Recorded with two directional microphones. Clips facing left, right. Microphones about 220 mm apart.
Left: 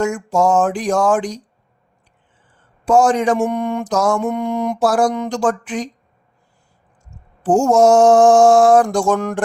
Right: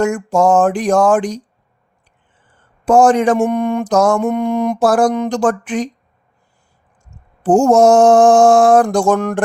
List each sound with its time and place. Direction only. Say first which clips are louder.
0.0 s mantra: right 3 dB; 55° right (ahead or behind)
2.8 s mantra: right 3 dB; 55° right (ahead or behind)
7.4 s mantra: right 3 dB; 55° right (ahead or behind)